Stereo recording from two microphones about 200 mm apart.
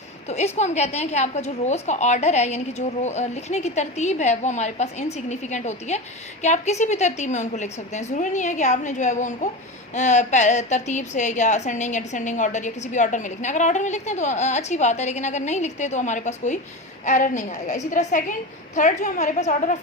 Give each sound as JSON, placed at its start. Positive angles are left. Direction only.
{"t": 0.3, "sound": "a woman's voice", "side_deg": 35}